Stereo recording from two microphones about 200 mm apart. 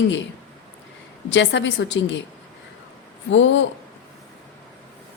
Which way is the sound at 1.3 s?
60° left (ahead or behind).